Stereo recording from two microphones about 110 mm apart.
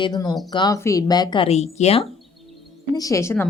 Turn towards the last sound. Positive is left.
turn(degrees=20)  # may be behind; listen again after turning